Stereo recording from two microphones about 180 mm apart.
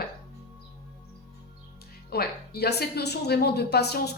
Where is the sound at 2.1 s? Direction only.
60° left (ahead or behind).